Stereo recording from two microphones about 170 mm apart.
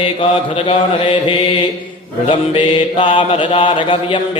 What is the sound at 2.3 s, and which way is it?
Music, 30° left (ahead or behind).